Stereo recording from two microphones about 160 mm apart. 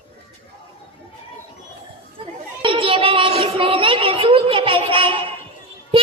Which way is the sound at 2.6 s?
35° right (ahead or behind).